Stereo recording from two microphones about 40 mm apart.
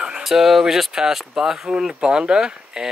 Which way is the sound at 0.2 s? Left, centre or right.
Centre.